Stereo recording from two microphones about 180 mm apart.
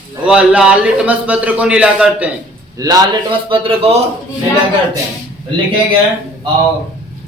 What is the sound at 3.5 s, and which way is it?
Speech, 30° right (ahead or behind).